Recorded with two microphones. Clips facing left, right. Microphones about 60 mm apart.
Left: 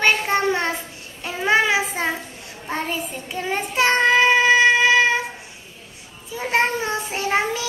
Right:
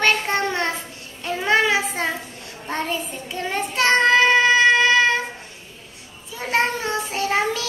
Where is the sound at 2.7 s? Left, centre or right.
Centre.